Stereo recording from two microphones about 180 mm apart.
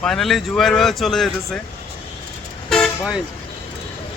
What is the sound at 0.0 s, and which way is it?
Speech, centre (ahead or behind).